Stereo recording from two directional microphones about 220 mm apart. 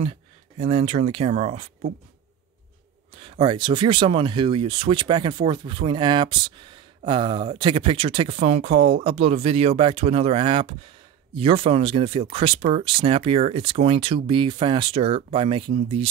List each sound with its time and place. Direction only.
0.0 s speech: 25° right (ahead or behind)
3.2 s speech: 25° right (ahead or behind)